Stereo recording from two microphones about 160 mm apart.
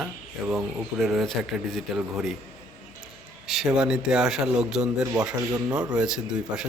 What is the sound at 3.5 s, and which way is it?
A man's voice, centre (ahead or behind).